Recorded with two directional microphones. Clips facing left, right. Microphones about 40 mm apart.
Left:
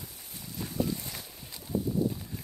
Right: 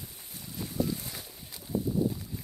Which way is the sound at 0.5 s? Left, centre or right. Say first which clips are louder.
Even; centre.